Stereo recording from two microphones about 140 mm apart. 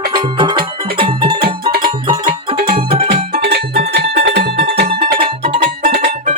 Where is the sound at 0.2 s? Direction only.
35° right (ahead or behind).